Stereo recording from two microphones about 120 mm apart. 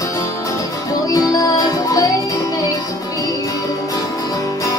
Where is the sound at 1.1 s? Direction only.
30° left (ahead or behind).